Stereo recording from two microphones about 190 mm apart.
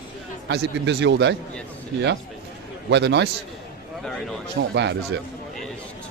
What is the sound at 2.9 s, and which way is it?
Speech, 65° right (ahead or behind).